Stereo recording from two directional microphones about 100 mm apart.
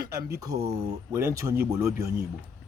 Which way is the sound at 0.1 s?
35° right (ahead or behind).